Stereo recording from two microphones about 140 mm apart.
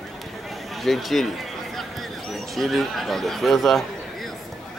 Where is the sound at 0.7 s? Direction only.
Centre (ahead or behind).